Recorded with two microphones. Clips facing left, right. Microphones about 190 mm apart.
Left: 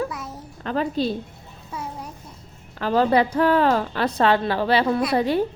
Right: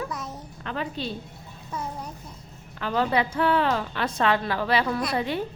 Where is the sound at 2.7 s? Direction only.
40° left (ahead or behind).